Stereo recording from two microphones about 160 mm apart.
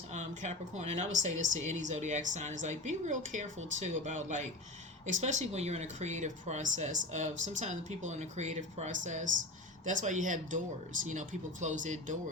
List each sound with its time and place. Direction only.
0.1 s speech: 45° right (ahead or behind)